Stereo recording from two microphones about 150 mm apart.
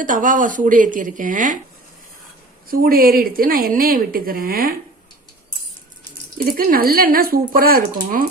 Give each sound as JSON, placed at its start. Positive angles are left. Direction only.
{"t": 0.0, "sound": "speech", "side_deg": -60}
{"t": 2.6, "sound": "a woman's voice", "side_deg": -75}
{"t": 6.3, "sound": "a woman's voice", "side_deg": -75}